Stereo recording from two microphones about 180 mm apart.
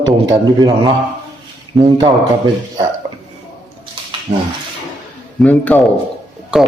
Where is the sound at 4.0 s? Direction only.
30° right (ahead or behind).